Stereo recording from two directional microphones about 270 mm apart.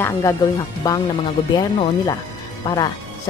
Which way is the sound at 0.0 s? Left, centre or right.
Centre.